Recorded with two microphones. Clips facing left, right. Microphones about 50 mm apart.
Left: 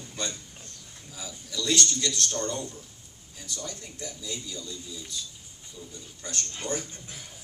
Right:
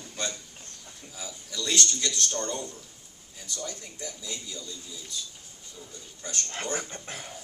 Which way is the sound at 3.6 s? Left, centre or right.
Centre.